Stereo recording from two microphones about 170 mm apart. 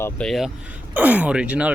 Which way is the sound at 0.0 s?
5° left (ahead or behind).